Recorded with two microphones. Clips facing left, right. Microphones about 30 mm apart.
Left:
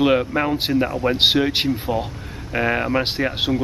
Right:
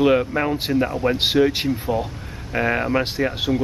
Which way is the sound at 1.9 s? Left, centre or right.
Centre.